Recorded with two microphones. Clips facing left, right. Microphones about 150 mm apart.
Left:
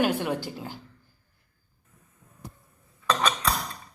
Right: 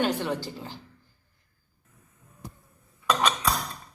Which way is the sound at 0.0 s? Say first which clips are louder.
Left 1 dB; 10° left (ahead or behind).